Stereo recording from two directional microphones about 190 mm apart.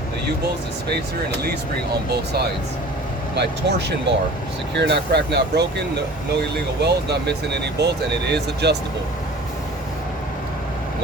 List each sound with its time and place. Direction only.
3.3 s speech: 60° right (ahead or behind)
6.8 s speech: 60° right (ahead or behind)